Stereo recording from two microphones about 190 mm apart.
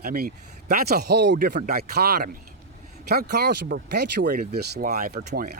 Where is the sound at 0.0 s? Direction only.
50° right (ahead or behind).